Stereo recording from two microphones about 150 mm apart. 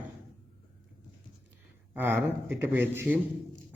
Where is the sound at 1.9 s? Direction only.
15° right (ahead or behind).